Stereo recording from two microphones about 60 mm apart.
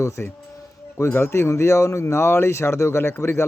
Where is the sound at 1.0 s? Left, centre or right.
Left.